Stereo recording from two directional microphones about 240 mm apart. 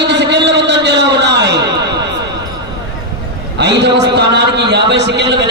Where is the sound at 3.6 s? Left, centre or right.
Right.